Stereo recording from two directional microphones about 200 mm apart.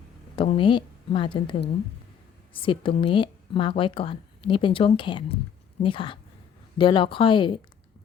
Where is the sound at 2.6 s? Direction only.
25° left (ahead or behind).